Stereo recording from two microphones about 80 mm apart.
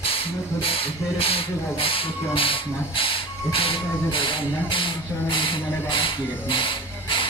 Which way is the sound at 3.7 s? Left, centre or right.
Left.